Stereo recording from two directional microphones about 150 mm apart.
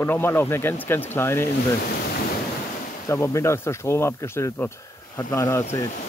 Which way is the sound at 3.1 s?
20° left (ahead or behind).